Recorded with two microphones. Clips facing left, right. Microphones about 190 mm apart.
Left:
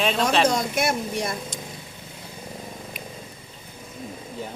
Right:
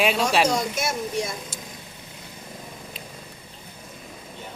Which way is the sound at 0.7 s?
60° left (ahead or behind).